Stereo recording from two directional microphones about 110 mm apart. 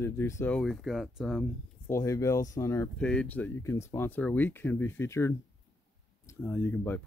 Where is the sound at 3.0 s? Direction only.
10° left (ahead or behind).